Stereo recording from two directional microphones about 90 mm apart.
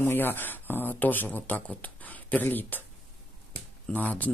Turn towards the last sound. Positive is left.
turn(degrees=20)  # may be behind; listen again after turning